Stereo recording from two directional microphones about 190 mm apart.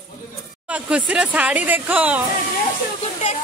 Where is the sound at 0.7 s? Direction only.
5° right (ahead or behind).